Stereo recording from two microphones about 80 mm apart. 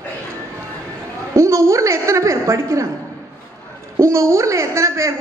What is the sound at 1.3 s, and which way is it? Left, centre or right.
A man's voice, right.